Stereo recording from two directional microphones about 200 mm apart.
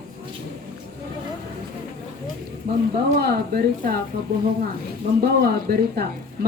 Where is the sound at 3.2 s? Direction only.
50° right (ahead or behind).